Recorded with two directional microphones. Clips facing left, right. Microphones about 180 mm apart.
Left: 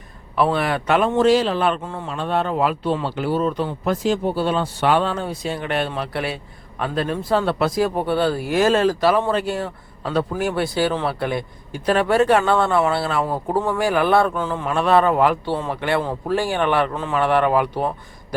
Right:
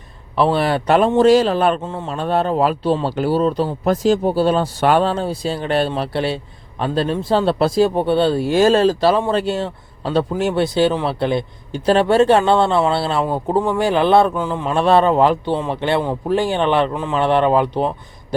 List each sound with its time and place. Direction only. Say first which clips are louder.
0.3 s a man's voice: right 3 dB; 30° right (ahead or behind)
1.8 s speech: right 3 dB; 20° right (ahead or behind)
2.0 s speech: right 4 dB; 40° right (ahead or behind)